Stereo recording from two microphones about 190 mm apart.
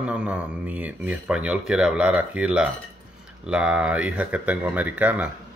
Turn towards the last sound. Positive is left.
turn(degrees=-10)  # may be behind; listen again after turning